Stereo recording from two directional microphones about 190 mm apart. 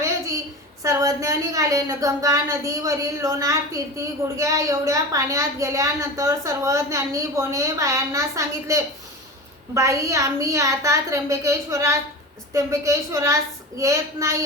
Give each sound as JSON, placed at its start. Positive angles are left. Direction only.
{"t": 0.8, "sound": "a woman's voice", "side_deg": -15}